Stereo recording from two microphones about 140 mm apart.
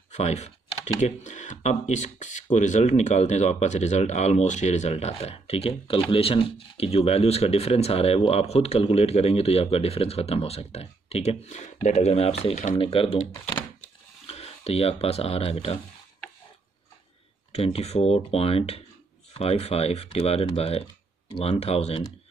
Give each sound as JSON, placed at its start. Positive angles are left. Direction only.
{"t": 0.1, "sound": "speech", "side_deg": 50}
{"t": 14.2, "sound": "speech", "side_deg": 45}
{"t": 17.5, "sound": "speech", "side_deg": 45}